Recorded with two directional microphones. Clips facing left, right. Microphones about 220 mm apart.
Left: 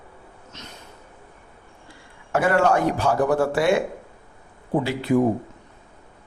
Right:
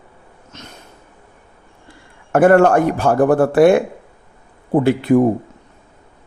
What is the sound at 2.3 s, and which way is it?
Speech, 55° right (ahead or behind).